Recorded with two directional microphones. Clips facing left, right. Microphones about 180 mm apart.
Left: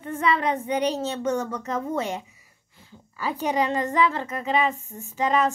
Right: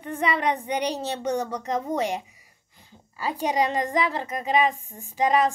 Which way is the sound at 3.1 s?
15° right (ahead or behind).